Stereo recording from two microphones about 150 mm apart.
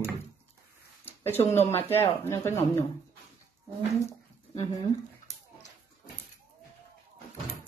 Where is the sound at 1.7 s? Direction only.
15° left (ahead or behind).